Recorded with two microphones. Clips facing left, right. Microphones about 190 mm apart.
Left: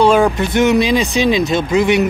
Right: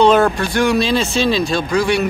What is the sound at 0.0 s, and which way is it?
Speech, 10° left (ahead or behind).